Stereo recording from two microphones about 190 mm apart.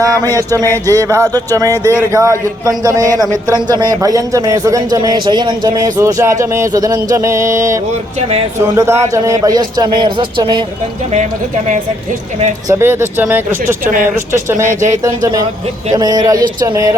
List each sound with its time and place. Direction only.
0.0 s a man's voice: 20° right (ahead or behind)
12.6 s a man's voice: 10° right (ahead or behind)
14.7 s speech: 40° right (ahead or behind)
15.0 s a man's voice: 20° right (ahead or behind)